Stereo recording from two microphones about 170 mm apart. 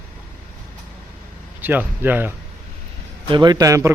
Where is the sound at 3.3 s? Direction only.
25° right (ahead or behind).